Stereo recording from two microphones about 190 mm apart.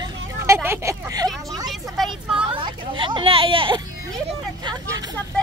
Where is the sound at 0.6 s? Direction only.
15° right (ahead or behind).